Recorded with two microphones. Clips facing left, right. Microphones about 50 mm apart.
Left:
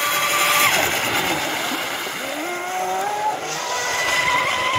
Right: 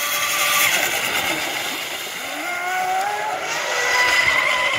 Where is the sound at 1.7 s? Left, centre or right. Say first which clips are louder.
Left 3 dB; centre.